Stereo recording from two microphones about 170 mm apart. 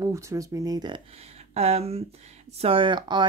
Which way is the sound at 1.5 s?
35° right (ahead or behind).